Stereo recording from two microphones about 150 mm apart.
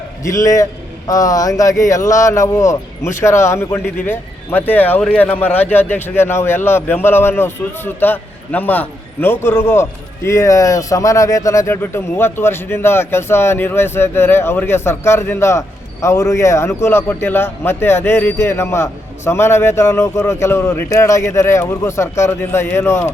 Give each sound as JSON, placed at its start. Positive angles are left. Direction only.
{"t": 0.3, "sound": "a man's voice", "side_deg": 20}